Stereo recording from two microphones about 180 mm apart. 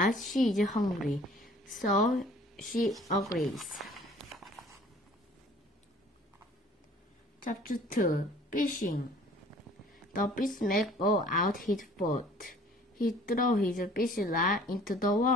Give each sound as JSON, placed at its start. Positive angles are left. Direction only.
{"t": 0.1, "sound": "a woman's voice", "side_deg": 0}
{"t": 3.3, "sound": "a sound", "side_deg": 0}
{"t": 7.4, "sound": "speech", "side_deg": 50}
{"t": 10.1, "sound": "speech", "side_deg": 50}